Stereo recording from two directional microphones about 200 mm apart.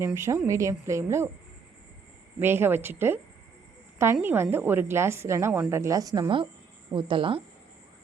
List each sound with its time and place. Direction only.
0.0 s a woman's voice: 15° right (ahead or behind)
2.4 s a woman's voice: 10° right (ahead or behind); by 7.4 s 25° right (ahead or behind)